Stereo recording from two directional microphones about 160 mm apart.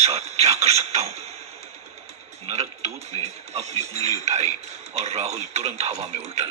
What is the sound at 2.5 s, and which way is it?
Speech, 45° right (ahead or behind).